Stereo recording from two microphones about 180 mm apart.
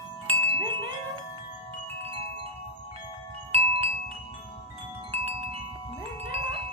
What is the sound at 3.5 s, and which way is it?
Wind chime, 35° right (ahead or behind).